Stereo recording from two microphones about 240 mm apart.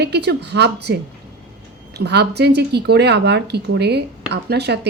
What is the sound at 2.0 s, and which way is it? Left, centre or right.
A woman's voice, right.